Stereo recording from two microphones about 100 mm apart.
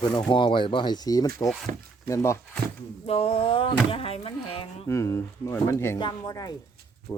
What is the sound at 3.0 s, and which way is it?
Speech, 85° left.